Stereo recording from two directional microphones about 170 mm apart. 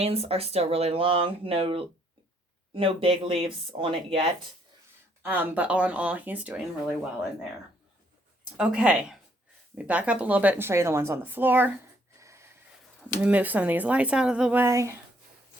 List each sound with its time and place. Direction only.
0.0 s speech: 35° right (ahead or behind)
5.2 s speech: 10° right (ahead or behind)
8.5 s speech: 5° right (ahead or behind)
12.2 s wheeze: 15° right (ahead or behind)
13.2 s speech: 10° right (ahead or behind)